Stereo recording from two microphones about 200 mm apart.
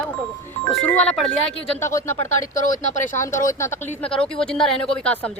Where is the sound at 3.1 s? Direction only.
15° left (ahead or behind).